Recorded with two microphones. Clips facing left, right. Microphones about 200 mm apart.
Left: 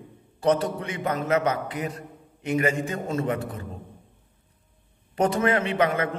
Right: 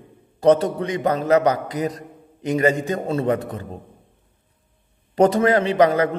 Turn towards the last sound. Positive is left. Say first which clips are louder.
# right 7 dB
turn(degrees=-35)  # may be behind; listen again after turning